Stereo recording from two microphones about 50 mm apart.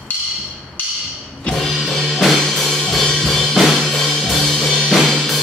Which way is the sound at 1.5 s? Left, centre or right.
Centre.